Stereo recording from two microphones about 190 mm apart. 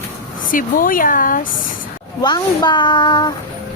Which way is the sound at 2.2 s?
20° left (ahead or behind).